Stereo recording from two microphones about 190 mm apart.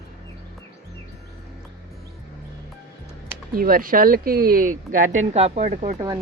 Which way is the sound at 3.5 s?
50° right (ahead or behind).